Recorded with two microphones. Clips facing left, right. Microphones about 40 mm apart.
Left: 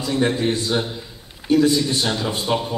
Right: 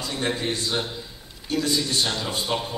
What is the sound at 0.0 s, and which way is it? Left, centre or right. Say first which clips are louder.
A man's voice: left 7 dB; centre.